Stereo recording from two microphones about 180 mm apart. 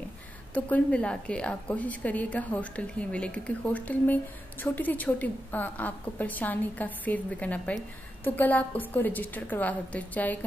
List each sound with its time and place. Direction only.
0.7 s a woman's voice: 5° left (ahead or behind)